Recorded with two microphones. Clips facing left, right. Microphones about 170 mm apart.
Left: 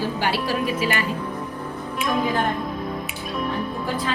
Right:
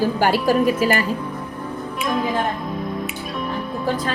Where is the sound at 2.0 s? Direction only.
Centre (ahead or behind).